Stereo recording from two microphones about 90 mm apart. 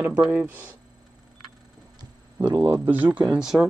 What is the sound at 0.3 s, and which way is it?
Speech, 20° right (ahead or behind).